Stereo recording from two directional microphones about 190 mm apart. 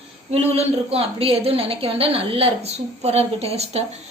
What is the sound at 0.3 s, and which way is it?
A woman's voice, 35° right (ahead or behind).